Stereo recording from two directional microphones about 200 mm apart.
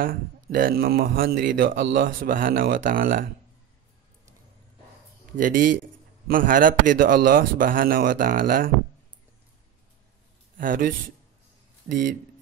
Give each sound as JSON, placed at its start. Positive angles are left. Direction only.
{"t": 0.0, "sound": "a man's voice", "side_deg": -45}
{"t": 5.4, "sound": "a man's voice", "side_deg": -40}
{"t": 10.6, "sound": "a man's voice", "side_deg": -45}